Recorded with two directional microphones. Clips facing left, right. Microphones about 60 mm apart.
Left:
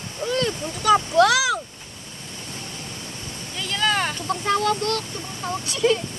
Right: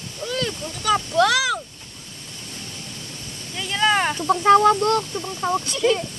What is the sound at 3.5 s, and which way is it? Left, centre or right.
Speech, centre.